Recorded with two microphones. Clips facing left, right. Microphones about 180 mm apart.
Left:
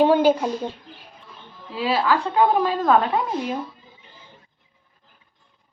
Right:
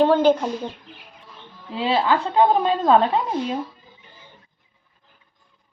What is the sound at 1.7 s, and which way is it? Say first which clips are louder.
A woman's voice: right 1 dB; 25° right (ahead or behind).